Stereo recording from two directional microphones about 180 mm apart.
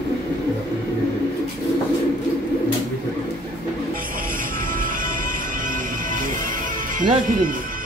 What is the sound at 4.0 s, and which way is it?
Music, 50° right (ahead or behind).